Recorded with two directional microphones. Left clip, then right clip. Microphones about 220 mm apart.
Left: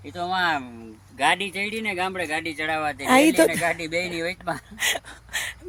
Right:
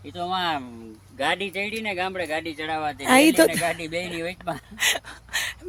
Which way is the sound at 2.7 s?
15° left (ahead or behind).